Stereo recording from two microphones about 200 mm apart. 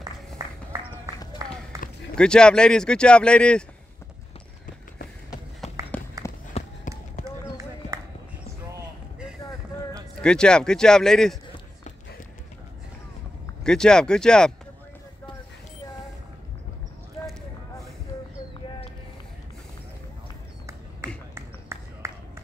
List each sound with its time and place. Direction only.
1.4 s run: 15° right (ahead or behind)
2.1 s speech: 5° left (ahead or behind)
5.6 s run: centre (ahead or behind)
6.2 s run: 15° left (ahead or behind)
10.2 s speech: 5° left (ahead or behind)
13.7 s speech: 5° left (ahead or behind)
21.0 s a sound: 15° right (ahead or behind)